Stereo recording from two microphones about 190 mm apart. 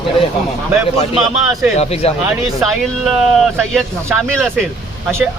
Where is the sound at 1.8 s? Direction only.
30° left (ahead or behind).